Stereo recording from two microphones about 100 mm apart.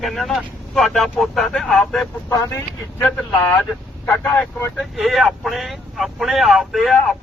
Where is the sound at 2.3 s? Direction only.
30° left (ahead or behind).